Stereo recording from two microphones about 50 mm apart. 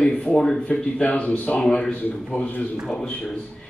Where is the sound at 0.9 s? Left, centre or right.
Left.